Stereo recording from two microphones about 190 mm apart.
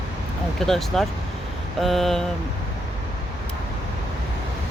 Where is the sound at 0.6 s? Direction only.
Centre (ahead or behind).